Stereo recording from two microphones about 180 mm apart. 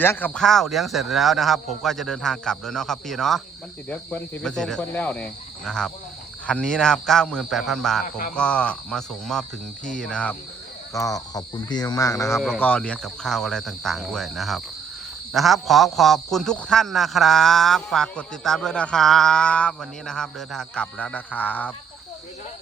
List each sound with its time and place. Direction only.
0.0 s a man's voice: 10° left (ahead or behind)
10.9 s speech: 20° left (ahead or behind)
12.4 s a man's voice: 5° left (ahead or behind)